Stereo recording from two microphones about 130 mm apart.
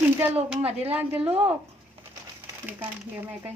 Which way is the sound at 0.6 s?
50° right (ahead or behind).